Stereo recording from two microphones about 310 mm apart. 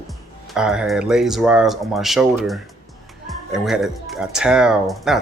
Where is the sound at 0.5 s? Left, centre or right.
Centre.